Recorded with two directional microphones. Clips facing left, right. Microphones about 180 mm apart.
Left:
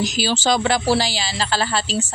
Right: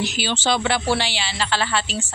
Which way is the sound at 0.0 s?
40° left (ahead or behind).